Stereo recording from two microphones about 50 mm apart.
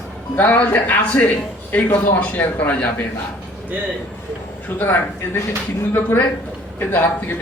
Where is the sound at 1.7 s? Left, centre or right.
Left.